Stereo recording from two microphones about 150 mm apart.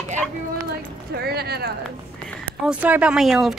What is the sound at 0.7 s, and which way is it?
Clip-clop, 90° right.